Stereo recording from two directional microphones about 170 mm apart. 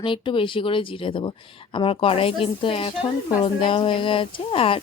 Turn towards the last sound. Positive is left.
turn(degrees=30)  # may be behind; listen again after turning